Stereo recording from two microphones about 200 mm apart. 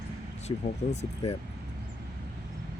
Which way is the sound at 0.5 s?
20° left (ahead or behind).